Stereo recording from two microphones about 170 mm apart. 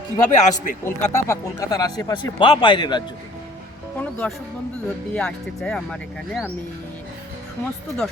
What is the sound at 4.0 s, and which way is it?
Speech, 10° left (ahead or behind).